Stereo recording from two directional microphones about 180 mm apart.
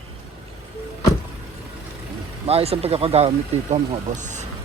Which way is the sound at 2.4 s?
35° right (ahead or behind).